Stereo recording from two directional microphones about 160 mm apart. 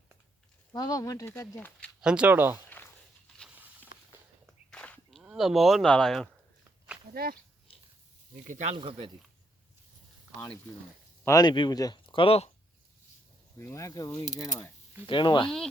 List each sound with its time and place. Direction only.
0.7 s speech: 25° left (ahead or behind)
2.0 s speech: 5° right (ahead or behind)
2.6 s walk: 10° left (ahead or behind)
4.7 s a sound: 5° left (ahead or behind)
5.2 s speech: 5° right (ahead or behind)
7.1 s speech: 70° right (ahead or behind)
8.4 s speech: 50° right (ahead or behind)
8.7 s a man's voice: 35° right (ahead or behind)
11.3 s speech: 25° left (ahead or behind)
13.6 s speech: 15° left (ahead or behind)